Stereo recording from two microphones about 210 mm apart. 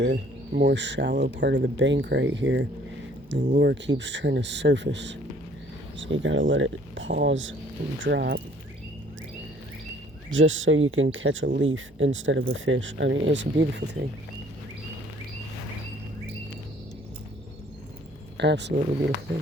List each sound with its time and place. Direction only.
0.0 s speech: 55° right (ahead or behind)
10.3 s speech: 65° right (ahead or behind)
18.3 s speech: 55° right (ahead or behind)